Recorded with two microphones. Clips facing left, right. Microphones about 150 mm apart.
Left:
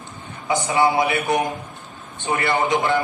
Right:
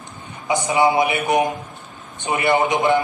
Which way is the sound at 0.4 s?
20° right (ahead or behind).